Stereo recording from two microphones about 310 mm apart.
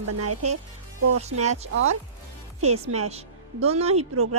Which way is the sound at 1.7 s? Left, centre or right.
Right.